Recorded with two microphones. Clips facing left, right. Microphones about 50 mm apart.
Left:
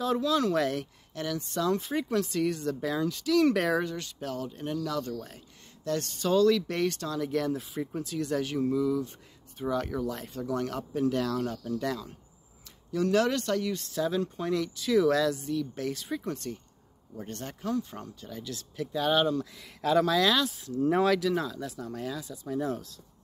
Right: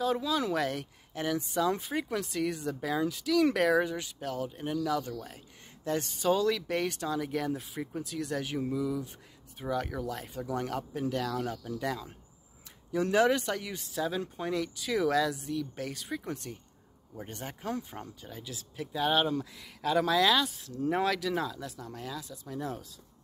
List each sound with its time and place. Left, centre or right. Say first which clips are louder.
0.0 s speech: left 3 dB; centre
1.1 s speech: right 1 dB; centre
3.8 s speech: even; centre
11.4 s speech: left 3 dB; centre